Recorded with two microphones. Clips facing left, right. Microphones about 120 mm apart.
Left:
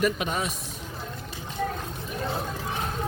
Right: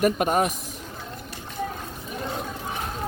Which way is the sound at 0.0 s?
50° right (ahead or behind).